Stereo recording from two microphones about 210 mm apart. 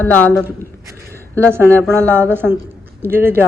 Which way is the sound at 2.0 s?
10° right (ahead or behind).